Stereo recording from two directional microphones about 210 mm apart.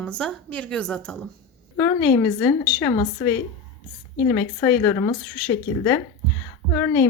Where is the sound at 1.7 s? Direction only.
15° left (ahead or behind).